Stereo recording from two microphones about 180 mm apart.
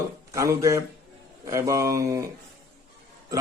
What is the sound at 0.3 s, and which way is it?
Speech, 15° right (ahead or behind).